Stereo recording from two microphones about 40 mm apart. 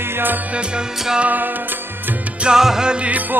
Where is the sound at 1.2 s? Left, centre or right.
Right.